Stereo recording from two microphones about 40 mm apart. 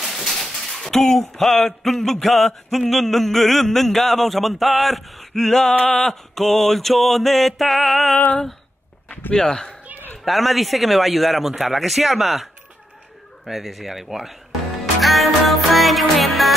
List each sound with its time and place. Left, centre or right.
0.1 s a sound: centre
1.8 s music: centre
9.3 s speech: centre
10.2 s music: centre
13.5 s music: centre